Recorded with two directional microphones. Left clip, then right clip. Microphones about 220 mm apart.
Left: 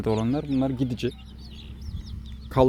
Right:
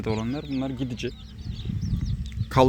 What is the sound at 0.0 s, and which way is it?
Speech, 25° left (ahead or behind).